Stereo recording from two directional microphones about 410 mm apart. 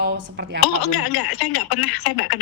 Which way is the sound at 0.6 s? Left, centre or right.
Left.